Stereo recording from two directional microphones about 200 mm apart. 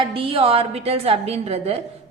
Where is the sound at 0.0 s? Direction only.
30° right (ahead or behind).